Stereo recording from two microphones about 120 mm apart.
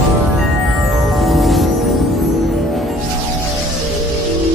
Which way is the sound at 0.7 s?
Centre (ahead or behind).